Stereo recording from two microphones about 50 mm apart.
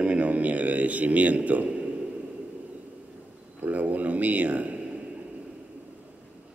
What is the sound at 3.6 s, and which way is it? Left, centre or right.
A man's voice, right.